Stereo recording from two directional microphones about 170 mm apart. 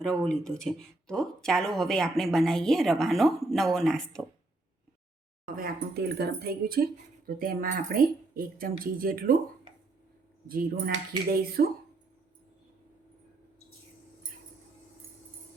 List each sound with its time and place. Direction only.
0.0 s speech: 5° left (ahead or behind)
5.5 s speech: 65° right (ahead or behind)
10.5 s speech: 60° right (ahead or behind)